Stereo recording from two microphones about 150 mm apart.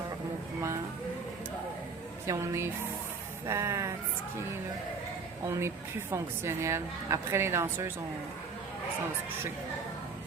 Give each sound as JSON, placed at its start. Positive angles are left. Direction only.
{"t": 2.2, "sound": "speech", "side_deg": -20}
{"t": 5.5, "sound": "a woman's voice", "side_deg": -20}